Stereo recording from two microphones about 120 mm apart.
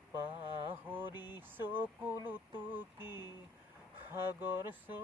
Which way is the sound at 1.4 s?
15° right (ahead or behind).